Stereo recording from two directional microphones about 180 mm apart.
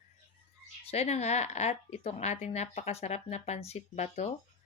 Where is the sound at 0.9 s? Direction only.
35° left (ahead or behind).